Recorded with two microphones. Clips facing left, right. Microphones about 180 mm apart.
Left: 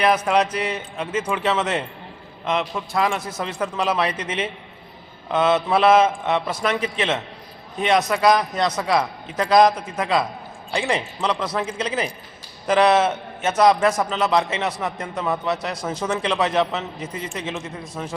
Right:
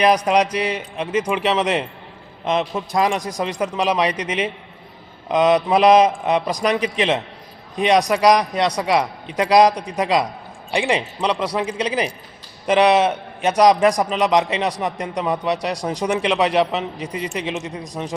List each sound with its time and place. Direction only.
0.0 s a man's voice: 15° right (ahead or behind)